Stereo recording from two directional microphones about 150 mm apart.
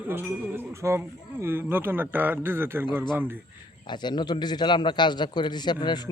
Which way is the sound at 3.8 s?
30° left (ahead or behind).